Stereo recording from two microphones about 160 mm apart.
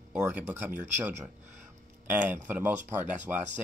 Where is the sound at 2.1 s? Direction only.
10° right (ahead or behind).